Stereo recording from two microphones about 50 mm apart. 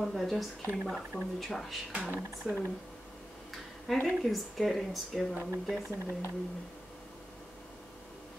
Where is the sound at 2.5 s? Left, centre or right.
Centre.